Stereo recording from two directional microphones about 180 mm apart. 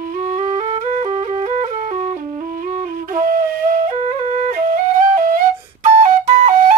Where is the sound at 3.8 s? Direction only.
35° right (ahead or behind).